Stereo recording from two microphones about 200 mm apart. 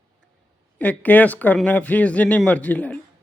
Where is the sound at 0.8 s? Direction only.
5° left (ahead or behind).